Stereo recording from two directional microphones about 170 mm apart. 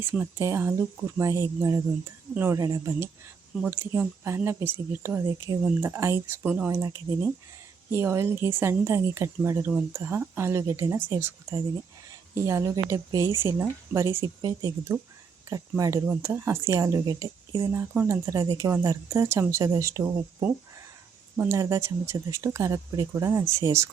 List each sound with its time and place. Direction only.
0.0 s speech: 10° right (ahead or behind)